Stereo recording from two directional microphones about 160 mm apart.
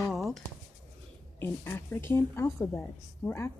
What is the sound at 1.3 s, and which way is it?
A woman's voice, 15° left (ahead or behind).